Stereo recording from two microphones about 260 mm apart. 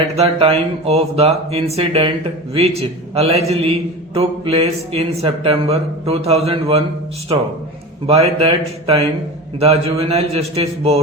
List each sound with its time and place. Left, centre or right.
0.2 s speech: right
8.0 s speech: right